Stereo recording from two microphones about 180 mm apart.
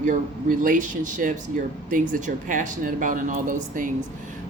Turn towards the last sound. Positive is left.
turn(degrees=-50)  # may be behind; listen again after turning